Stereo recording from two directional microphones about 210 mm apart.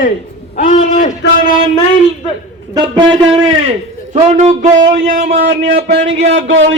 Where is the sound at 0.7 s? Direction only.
35° left (ahead or behind).